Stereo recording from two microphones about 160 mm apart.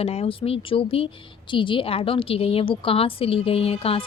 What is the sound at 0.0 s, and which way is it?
Speech, 40° left (ahead or behind).